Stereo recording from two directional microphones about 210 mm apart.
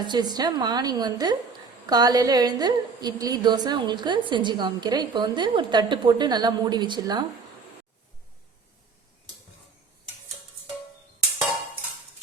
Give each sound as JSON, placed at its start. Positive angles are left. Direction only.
{"t": 0.0, "sound": "a woman's voice", "side_deg": -20}